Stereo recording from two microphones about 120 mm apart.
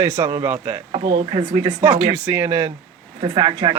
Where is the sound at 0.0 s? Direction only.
25° right (ahead or behind).